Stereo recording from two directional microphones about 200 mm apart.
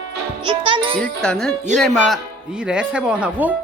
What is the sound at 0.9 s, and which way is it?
Speech, 5° left (ahead or behind).